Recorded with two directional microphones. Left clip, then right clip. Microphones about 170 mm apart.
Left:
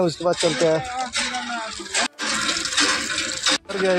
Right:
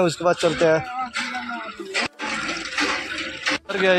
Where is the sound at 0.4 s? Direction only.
10° left (ahead or behind).